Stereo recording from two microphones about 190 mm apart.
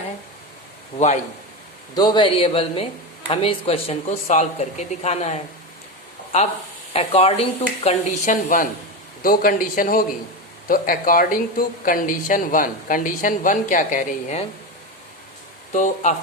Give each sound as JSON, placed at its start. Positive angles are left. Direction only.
{"t": 0.9, "sound": "speech", "side_deg": 35}
{"t": 2.0, "sound": "speech", "side_deg": 25}
{"t": 6.9, "sound": "speech", "side_deg": 30}
{"t": 15.7, "sound": "speech", "side_deg": 40}